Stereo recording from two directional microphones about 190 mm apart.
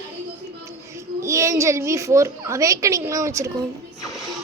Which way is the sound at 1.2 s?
15° right (ahead or behind).